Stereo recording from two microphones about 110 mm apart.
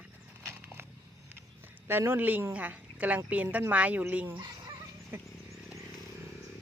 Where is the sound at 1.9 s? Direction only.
20° right (ahead or behind).